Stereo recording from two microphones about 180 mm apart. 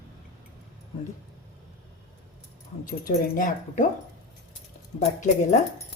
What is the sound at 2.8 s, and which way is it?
A woman's voice, 45° left (ahead or behind).